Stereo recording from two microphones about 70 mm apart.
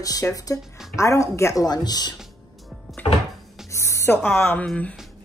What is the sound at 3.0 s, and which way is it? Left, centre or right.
Music, left.